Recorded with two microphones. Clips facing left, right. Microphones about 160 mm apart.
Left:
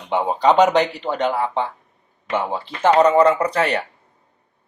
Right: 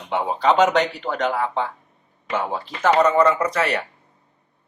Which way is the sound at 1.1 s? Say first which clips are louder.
Left 2 dB; 30° left (ahead or behind).